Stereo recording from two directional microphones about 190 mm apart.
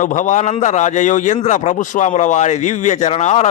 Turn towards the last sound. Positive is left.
turn(degrees=35)  # may be behind; listen again after turning